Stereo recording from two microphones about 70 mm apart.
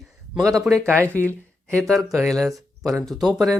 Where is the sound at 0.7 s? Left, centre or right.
Centre.